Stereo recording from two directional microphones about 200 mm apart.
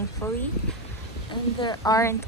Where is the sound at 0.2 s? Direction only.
15° left (ahead or behind).